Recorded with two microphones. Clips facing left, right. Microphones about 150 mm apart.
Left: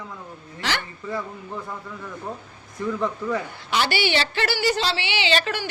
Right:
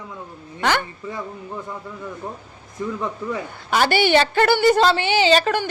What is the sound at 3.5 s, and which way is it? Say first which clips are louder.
A woman's voice: right 5 dB; 50° right (ahead or behind).